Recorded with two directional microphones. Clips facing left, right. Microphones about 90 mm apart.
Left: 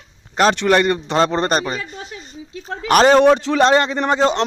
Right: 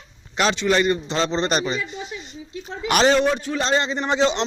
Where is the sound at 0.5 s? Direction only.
60° left (ahead or behind).